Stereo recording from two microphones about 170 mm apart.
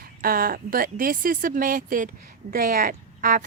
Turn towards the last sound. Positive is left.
turn(degrees=-55)  # may be behind; listen again after turning